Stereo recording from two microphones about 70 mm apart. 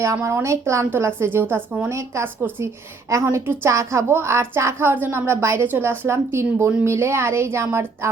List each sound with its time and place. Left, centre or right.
0.0 s a woman's voice: right
3.3 s a woman's voice: right
3.7 s a woman's voice: right